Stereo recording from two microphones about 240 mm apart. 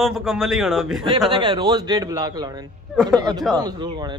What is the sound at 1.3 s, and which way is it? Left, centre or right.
A man's voice, centre.